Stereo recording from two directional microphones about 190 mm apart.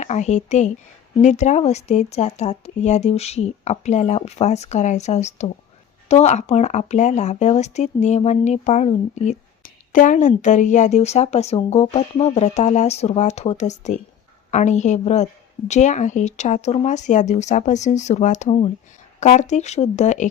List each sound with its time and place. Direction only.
0.0 s speech: 35° left (ahead or behind)